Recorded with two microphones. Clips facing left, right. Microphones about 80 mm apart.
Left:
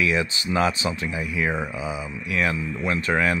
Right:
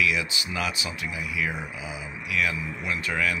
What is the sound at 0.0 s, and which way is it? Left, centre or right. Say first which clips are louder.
Speech: left 3 dB; left.